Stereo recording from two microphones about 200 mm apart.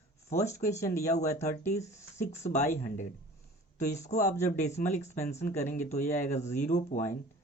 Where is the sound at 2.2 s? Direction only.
35° left (ahead or behind).